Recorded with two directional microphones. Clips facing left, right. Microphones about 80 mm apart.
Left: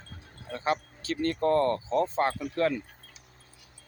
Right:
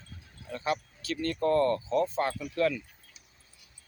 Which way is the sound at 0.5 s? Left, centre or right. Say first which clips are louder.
Left 2 dB; left.